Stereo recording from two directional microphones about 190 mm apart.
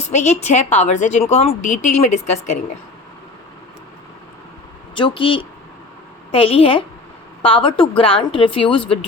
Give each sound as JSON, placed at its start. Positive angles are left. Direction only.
{"t": 0.0, "sound": "a woman's voice", "side_deg": 35}
{"t": 4.9, "sound": "a woman's voice", "side_deg": 25}